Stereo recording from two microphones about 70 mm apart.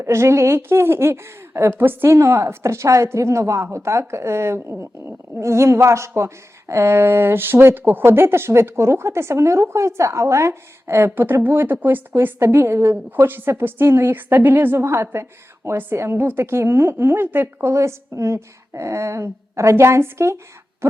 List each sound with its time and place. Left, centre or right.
0.0 s speech: right
2.1 s a woman's voice: right